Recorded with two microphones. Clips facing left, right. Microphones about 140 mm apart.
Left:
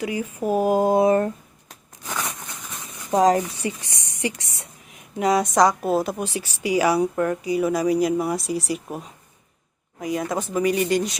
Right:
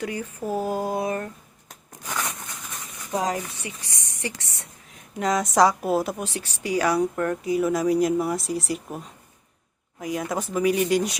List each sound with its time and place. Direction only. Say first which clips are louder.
0.0 s speech: left 4 dB; 10° left (ahead or behind); by 1.3 s 30° left (ahead or behind)
3.1 s speech: left 8 dB; 45° left (ahead or behind)
3.6 s a woman's voice: left 9 dB; 30° left (ahead or behind)
4.2 s speech: left 6 dB; 15° left (ahead or behind)
5.2 s a woman's voice: left 2 dB; 5° left (ahead or behind)